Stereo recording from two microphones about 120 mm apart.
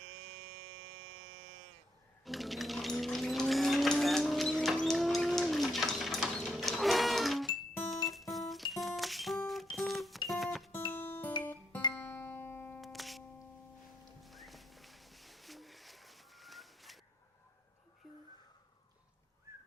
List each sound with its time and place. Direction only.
2.2 s sewing machine: centre (ahead or behind)
8.0 s music: centre (ahead or behind)
10.9 s guitar: 15° left (ahead or behind)
11.9 s music: 15° left (ahead or behind)
12.8 s music: centre (ahead or behind)
18.0 s a sound: centre (ahead or behind)
19.5 s whistling: 20° right (ahead or behind)